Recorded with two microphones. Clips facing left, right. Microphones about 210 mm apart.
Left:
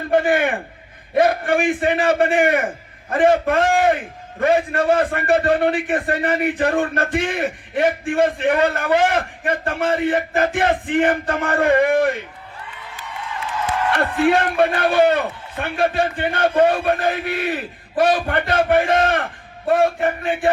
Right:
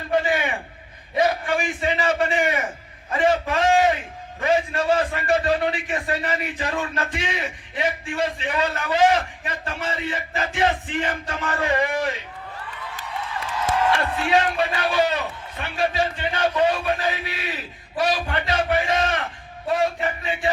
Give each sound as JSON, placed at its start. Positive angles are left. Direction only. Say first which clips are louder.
{"t": 0.1, "sound": "a man's voice", "louder": "left 5 dB", "side_deg": 55}
{"t": 13.9, "sound": "a man's voice", "louder": "left 4 dB", "side_deg": 55}